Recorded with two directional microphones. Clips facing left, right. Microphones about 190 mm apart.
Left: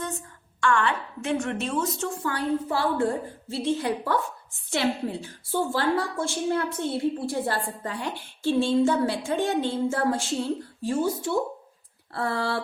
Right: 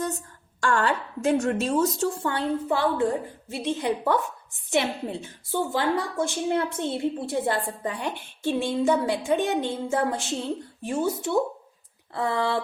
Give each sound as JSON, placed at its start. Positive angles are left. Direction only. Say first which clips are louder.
{"t": 0.6, "sound": "a woman's voice", "louder": "even", "side_deg": -40}